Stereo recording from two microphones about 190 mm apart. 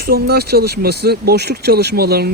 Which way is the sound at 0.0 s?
60° right (ahead or behind).